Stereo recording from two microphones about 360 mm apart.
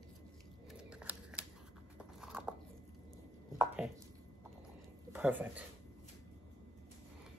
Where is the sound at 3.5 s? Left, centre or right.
Centre.